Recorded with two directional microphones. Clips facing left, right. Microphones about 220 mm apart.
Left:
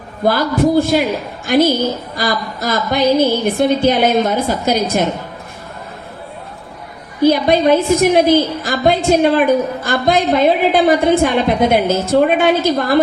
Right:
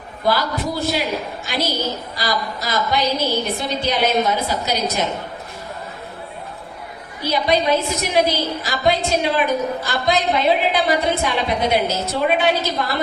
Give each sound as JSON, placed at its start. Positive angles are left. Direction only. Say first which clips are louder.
{"t": 0.3, "sound": "a woman's voice", "louder": "left 7 dB", "side_deg": 50}
{"t": 7.2, "sound": "a woman's voice", "louder": "left 8 dB", "side_deg": 50}